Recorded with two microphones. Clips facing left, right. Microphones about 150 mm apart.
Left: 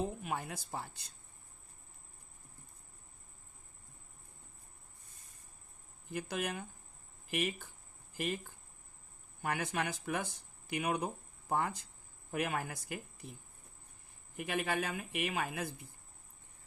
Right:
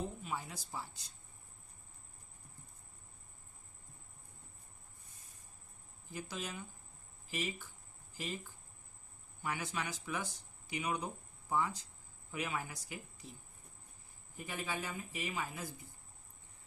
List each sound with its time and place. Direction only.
0.2 s speech: 60° left (ahead or behind)
6.1 s speech: 60° left (ahead or behind)
14.3 s speech: 70° left (ahead or behind)